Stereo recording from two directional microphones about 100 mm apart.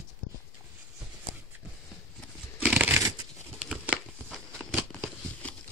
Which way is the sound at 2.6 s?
15° right (ahead or behind).